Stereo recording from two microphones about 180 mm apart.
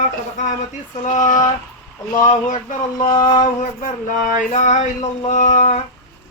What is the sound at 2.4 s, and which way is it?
Male singing, 45° left (ahead or behind).